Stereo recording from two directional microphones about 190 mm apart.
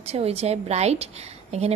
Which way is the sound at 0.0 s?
35° right (ahead or behind).